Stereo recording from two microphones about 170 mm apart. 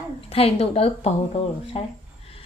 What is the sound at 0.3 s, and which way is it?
Speech, 35° left (ahead or behind).